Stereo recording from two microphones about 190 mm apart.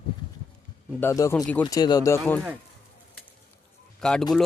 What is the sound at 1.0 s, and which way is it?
Speech, 15° left (ahead or behind).